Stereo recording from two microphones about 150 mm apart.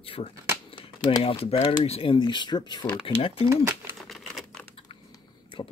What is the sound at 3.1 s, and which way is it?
Speech, 40° left (ahead or behind).